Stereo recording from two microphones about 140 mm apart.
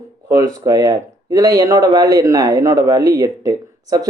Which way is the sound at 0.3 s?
25° right (ahead or behind).